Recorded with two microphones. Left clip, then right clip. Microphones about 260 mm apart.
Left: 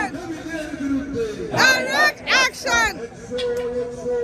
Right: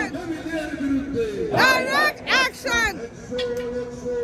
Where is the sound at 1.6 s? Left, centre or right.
Right.